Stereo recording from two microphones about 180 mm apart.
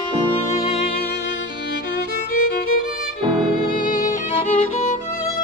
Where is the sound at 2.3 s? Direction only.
60° left (ahead or behind).